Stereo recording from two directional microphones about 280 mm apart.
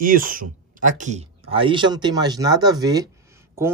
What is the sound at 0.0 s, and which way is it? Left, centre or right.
Speech, right.